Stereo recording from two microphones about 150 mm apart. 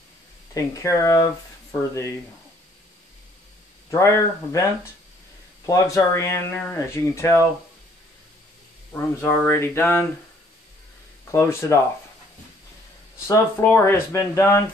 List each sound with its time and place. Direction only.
0.6 s speech: 20° left (ahead or behind)
3.9 s speech: 20° left (ahead or behind)
5.7 s speech: 20° left (ahead or behind)
8.9 s speech: 15° left (ahead or behind)
11.3 s speech: 15° left (ahead or behind)
13.3 s speech: 15° left (ahead or behind)